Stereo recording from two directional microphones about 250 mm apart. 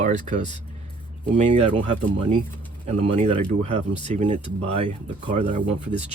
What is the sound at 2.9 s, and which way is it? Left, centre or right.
Speech, right.